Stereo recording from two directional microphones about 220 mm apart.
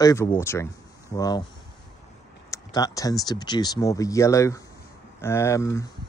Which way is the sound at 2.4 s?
15° left (ahead or behind).